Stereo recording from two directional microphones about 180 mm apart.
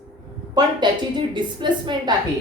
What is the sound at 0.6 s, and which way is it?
A woman's voice, 25° right (ahead or behind).